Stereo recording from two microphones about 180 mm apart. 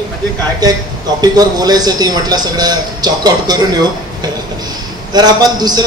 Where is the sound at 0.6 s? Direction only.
20° right (ahead or behind).